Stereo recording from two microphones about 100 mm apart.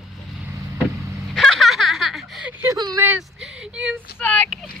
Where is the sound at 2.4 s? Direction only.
20° right (ahead or behind).